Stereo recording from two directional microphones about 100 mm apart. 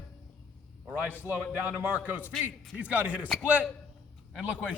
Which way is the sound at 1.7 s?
15° right (ahead or behind).